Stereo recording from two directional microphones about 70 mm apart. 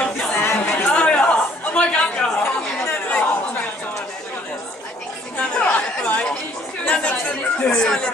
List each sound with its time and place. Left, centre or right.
0.5 s chatter: left
0.8 s chatter: centre
2.3 s chatter: left
5.4 s chatter: centre